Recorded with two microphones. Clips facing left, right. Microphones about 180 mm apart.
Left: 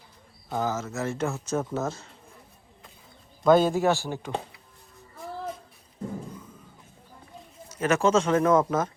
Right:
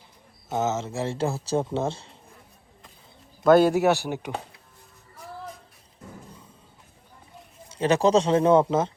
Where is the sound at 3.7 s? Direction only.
15° right (ahead or behind).